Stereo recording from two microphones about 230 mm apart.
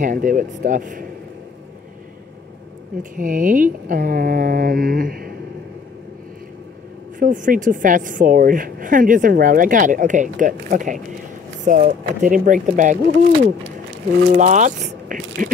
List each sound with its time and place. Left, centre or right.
0.0 s a woman's voice: right
3.0 s a woman's voice: right
7.2 s a woman's voice: right
14.3 s a woman's voice: right